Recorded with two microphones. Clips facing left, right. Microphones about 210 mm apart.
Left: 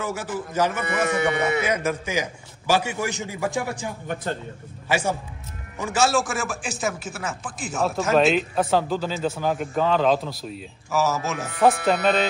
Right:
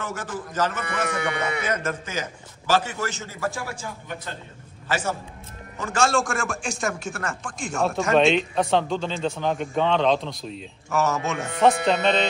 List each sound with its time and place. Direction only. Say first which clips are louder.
0.0 s a man's voice: left 3 dB; 10° left (ahead or behind)
1.1 s speech: left 5 dB; 25° left (ahead or behind)
1.6 s a man's voice: left 3 dB; 10° left (ahead or behind)
4.8 s a man's voice: left 3 dB; 10° left (ahead or behind)